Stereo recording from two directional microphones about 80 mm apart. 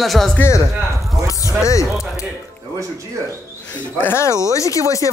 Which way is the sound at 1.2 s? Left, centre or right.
Left.